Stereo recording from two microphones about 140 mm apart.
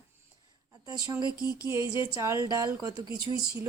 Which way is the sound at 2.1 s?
20° right (ahead or behind).